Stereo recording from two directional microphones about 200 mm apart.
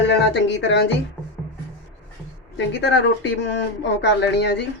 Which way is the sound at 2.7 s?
60° left (ahead or behind).